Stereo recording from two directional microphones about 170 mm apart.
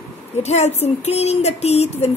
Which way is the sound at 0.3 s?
40° left (ahead or behind).